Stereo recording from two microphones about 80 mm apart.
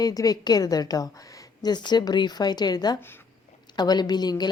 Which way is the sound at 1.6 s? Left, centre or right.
Left.